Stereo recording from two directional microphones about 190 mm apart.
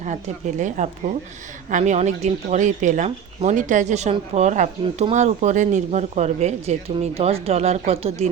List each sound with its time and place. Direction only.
0.0 s speech: 40° right (ahead or behind)